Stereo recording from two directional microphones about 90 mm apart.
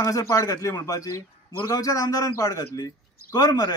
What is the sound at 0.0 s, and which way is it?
A man's voice, 40° left (ahead or behind).